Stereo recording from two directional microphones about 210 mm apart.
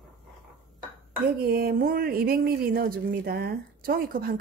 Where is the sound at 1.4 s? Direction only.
45° right (ahead or behind).